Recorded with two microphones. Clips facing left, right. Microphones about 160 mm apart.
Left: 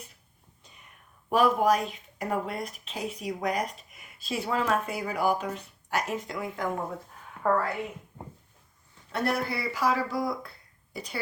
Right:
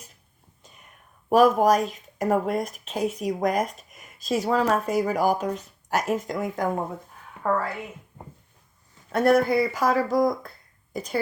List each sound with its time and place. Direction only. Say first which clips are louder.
1.3 s speech: right 5 dB; 45° right (ahead or behind)
7.4 s a woman's voice: right 1 dB; centre (ahead or behind)
9.1 s speech: right 10 dB; 50° right (ahead or behind)